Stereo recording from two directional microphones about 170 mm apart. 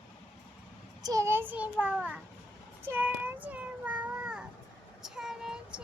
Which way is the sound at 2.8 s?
10° right (ahead or behind).